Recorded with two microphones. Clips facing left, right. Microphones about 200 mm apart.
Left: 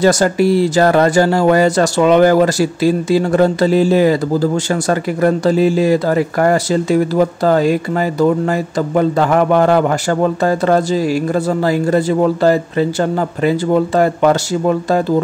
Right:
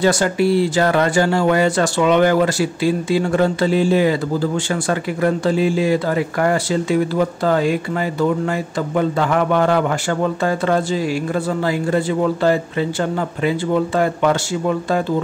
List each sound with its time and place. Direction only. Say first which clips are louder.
0.0 s speech: left 4 dB; 40° left (ahead or behind)